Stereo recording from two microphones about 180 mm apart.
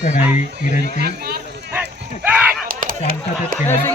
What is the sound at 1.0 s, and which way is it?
Speech, 60° right (ahead or behind).